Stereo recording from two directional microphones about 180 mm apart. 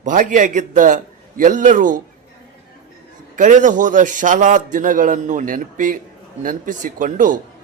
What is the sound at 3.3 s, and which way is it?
Speech, 45° right (ahead or behind).